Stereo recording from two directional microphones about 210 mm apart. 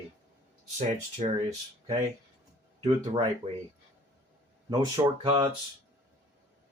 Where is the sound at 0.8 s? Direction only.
35° right (ahead or behind).